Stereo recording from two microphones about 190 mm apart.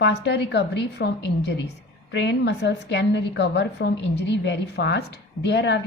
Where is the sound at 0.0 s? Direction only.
60° left (ahead or behind).